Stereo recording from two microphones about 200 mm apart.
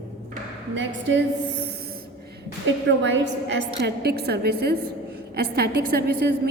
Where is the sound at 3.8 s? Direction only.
55° right (ahead or behind).